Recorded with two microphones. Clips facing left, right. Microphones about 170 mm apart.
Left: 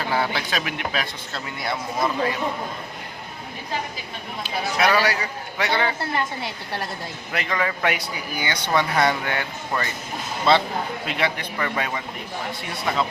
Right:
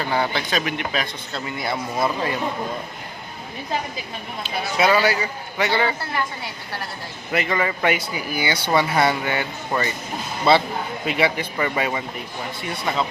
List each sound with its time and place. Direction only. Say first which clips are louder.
0.1 s speech: right 1 dB; centre (ahead or behind)
4.8 s speech: right 3 dB; centre (ahead or behind)
7.3 s speech: right 3 dB; 5° right (ahead or behind)